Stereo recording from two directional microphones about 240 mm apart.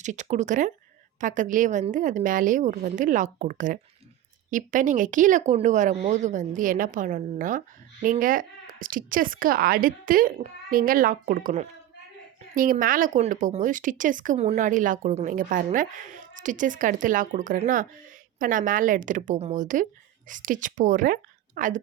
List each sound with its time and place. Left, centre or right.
0.0 s speech: right